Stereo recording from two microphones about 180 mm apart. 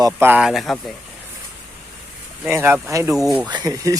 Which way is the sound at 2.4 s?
10° right (ahead or behind).